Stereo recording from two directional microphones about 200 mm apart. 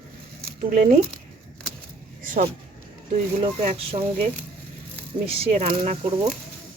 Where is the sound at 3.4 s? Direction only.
30° right (ahead or behind).